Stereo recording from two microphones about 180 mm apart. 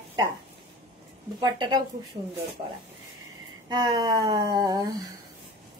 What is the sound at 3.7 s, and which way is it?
A woman's voice, 25° right (ahead or behind).